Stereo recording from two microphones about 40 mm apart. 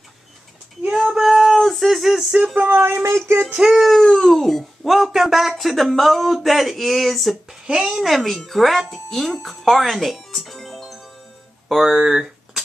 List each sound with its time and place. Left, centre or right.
1.1 s a sound: centre
2.5 s speech: right
2.8 s a sound: right
3.7 s speech: centre
7.7 s speech: centre
8.0 s speech: centre
11.7 s speech: centre